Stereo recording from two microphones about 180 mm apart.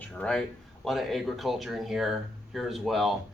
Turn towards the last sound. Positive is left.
turn(degrees=0)  # may be behind; listen again after turning